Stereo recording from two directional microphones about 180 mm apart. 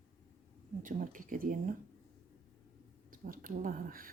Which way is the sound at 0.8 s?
50° right (ahead or behind).